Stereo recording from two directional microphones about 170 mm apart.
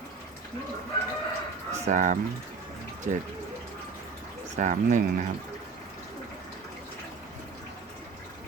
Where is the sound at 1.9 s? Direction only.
50° right (ahead or behind).